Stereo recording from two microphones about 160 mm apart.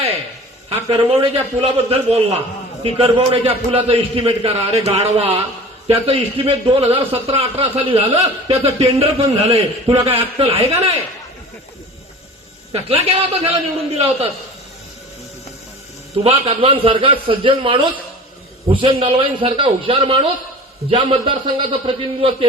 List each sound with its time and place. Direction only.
0.7 s a man's voice: 35° right (ahead or behind)
12.7 s a man's voice: 40° right (ahead or behind)
16.2 s a man's voice: 40° right (ahead or behind)